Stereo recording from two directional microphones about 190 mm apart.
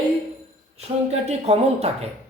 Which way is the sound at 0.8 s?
35° right (ahead or behind).